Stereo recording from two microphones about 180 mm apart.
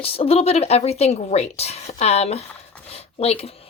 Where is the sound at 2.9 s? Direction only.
35° left (ahead or behind).